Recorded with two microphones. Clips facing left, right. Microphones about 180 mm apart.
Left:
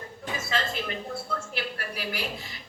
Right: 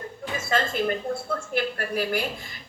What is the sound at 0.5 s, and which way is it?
A woman's voice, 50° right (ahead or behind).